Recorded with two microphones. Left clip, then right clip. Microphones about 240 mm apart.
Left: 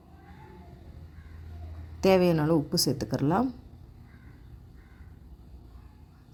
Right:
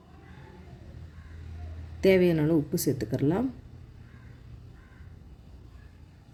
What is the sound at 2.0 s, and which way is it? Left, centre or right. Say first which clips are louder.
Speech: even; centre.